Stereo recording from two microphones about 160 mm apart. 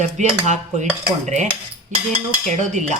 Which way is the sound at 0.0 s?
45° right (ahead or behind).